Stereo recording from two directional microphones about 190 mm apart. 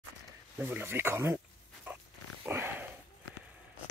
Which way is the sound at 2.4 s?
10° right (ahead or behind).